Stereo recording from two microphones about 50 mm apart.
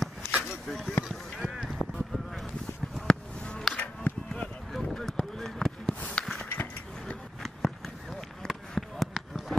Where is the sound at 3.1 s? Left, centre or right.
Centre.